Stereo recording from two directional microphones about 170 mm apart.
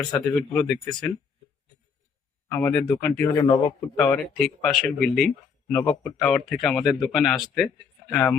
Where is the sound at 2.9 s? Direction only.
15° left (ahead or behind).